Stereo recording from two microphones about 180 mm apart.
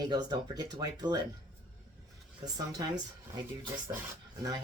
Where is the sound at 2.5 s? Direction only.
20° right (ahead or behind).